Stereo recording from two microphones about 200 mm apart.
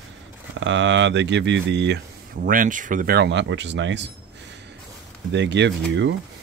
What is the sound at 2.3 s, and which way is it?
Speech, 45° right (ahead or behind).